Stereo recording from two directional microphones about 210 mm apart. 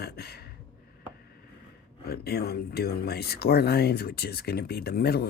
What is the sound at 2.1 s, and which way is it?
Speech, 50° left (ahead or behind).